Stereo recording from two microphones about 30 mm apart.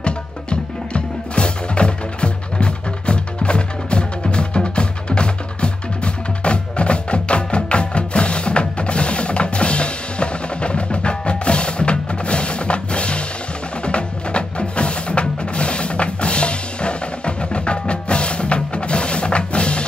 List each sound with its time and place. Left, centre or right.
0.0 s music: left
13.8 s wood block: left
17.4 s music: left